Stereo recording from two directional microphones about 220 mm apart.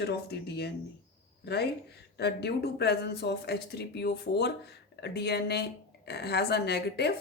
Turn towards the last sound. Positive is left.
turn(degrees=50)  # may be behind; listen again after turning